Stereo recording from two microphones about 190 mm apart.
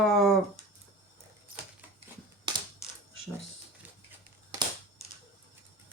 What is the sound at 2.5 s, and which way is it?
Coin, 25° right (ahead or behind).